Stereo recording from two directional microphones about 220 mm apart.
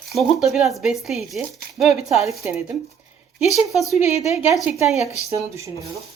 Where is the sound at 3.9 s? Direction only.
30° left (ahead or behind).